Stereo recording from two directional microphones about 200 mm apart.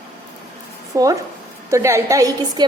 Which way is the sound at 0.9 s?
15° right (ahead or behind).